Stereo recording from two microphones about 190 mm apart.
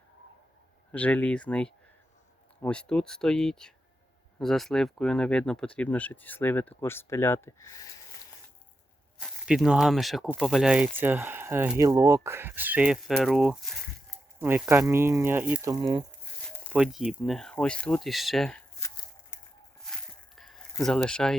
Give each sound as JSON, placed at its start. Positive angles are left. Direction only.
{"t": 0.9, "sound": "speech", "side_deg": 5}
{"t": 9.1, "sound": "speech", "side_deg": 0}
{"t": 15.7, "sound": "speech", "side_deg": -25}
{"t": 16.6, "sound": "speech", "side_deg": -5}
{"t": 19.8, "sound": "a sound", "side_deg": 5}
{"t": 20.8, "sound": "speech", "side_deg": 5}